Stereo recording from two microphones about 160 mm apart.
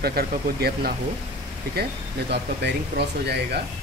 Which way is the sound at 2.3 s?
90° right.